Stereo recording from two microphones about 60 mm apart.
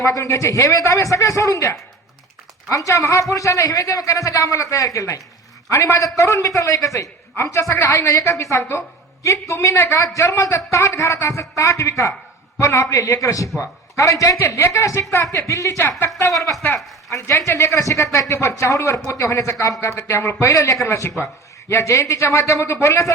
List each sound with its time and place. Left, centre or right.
0.0 s a man's voice: left
7.3 s a man's voice: left
14.7 s a man's voice: left
15.8 s speech: left
16.1 s a man's voice: left
20.8 s speech: left